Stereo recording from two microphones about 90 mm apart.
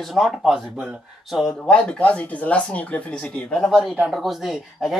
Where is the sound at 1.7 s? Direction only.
15° left (ahead or behind).